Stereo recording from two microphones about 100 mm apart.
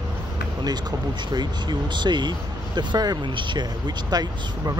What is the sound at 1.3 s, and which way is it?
Speech, 45° right (ahead or behind).